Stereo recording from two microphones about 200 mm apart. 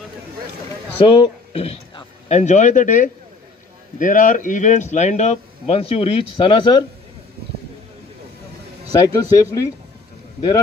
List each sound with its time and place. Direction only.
0.9 s speech: 25° left (ahead or behind)
8.9 s a man's voice: 20° left (ahead or behind)